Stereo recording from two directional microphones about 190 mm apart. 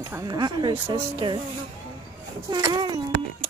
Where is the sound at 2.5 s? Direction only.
20° right (ahead or behind).